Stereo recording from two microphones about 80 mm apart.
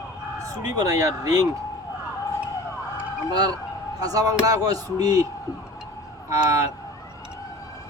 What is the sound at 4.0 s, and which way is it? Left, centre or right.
Speech, right.